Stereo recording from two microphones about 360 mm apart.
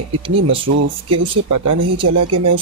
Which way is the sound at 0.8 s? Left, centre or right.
Right.